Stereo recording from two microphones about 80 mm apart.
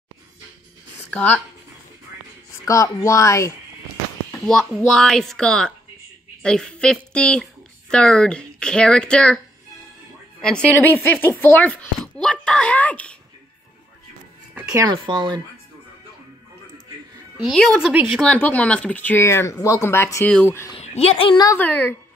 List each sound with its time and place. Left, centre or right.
1.1 s speech: centre
2.6 s speech: left
4.5 s speech: centre
10.4 s speech: centre
10.8 s speech: left
15.0 s speech: right
17.5 s speech: centre
17.9 s speech: centre
18.4 s speech: centre
19.2 s speech: left
20.7 s speech: left
21.5 s speech: left